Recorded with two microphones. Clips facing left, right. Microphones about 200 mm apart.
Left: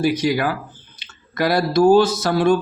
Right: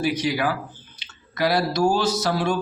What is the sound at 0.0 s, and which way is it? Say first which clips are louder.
Speech: left 4 dB; 45° left (ahead or behind).